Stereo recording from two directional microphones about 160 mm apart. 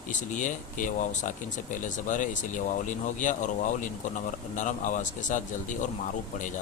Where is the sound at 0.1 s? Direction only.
50° left (ahead or behind).